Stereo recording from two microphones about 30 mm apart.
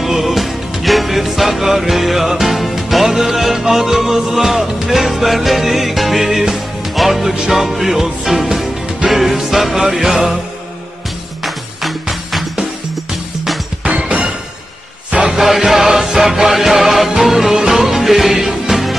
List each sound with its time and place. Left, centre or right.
0.0 s music: centre
11.4 s music: centre
15.0 s music: right
15.3 s music: centre